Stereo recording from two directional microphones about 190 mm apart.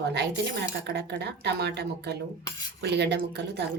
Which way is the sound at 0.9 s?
60° right (ahead or behind).